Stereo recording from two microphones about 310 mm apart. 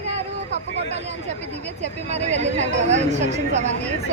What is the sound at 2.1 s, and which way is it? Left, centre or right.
A woman's voice, right.